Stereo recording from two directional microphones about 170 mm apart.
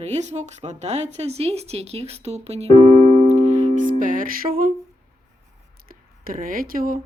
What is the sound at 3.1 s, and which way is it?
Music, 40° right (ahead or behind).